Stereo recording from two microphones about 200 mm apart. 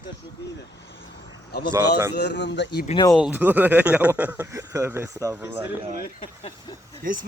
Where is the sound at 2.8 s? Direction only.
20° left (ahead or behind).